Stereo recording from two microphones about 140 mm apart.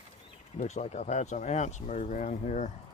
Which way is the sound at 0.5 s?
55° left (ahead or behind).